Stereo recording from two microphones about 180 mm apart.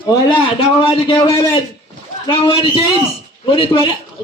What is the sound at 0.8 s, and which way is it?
A man's voice, 30° left (ahead or behind).